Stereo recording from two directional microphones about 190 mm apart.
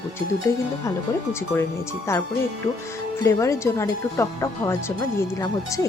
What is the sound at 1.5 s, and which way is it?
Speech, 15° left (ahead or behind).